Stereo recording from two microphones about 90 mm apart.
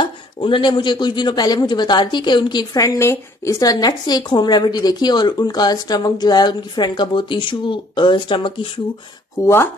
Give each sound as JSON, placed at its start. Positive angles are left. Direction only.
{"t": 0.0, "sound": "a man's voice", "side_deg": 65}
{"t": 3.0, "sound": "a woman's voice", "side_deg": 30}
{"t": 9.4, "sound": "speech", "side_deg": 30}